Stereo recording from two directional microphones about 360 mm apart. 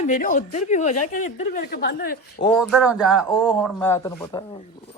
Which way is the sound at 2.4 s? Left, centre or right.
Centre.